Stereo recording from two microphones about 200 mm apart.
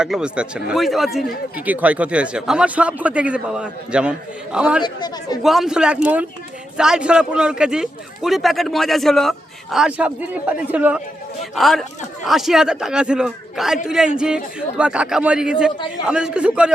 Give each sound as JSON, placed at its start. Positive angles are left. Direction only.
{"t": 0.0, "sound": "speech", "side_deg": -5}
{"t": 4.8, "sound": "speech", "side_deg": 20}
{"t": 5.4, "sound": "speech", "side_deg": 0}